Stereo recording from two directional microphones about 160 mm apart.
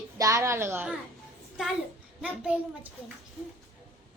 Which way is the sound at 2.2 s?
10° right (ahead or behind).